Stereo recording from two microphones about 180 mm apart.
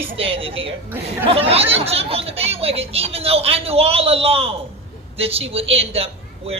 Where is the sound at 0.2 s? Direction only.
30° right (ahead or behind).